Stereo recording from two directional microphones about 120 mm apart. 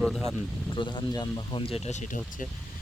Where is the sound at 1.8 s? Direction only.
75° left (ahead or behind); by 2.5 s 90° left.